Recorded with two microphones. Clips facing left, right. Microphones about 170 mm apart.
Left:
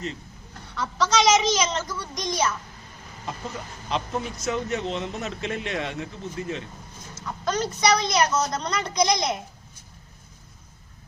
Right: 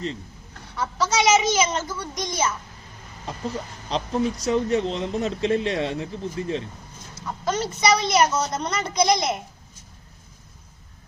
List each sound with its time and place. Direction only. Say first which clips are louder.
0.8 s a child's voice: even; 5° right (ahead or behind)
3.8 s speech: right 4 dB; 35° right (ahead or behind)
7.4 s a woman's voice: right 1 dB; 5° right (ahead or behind)